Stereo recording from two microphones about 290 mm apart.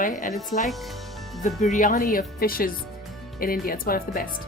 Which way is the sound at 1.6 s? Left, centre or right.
Left.